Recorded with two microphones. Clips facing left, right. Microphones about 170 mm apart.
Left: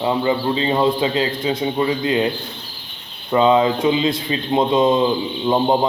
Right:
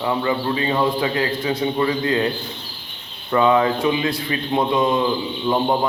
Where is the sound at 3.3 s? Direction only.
20° left (ahead or behind).